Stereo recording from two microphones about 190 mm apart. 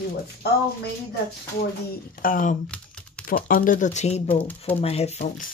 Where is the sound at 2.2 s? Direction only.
45° left (ahead or behind).